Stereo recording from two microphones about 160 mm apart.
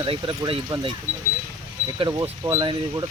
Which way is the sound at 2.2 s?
25° right (ahead or behind).